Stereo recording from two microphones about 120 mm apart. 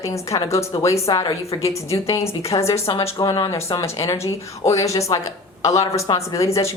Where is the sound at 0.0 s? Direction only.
25° left (ahead or behind).